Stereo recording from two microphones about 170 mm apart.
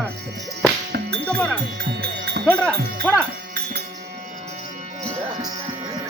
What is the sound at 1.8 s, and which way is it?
Speech, 70° right (ahead or behind).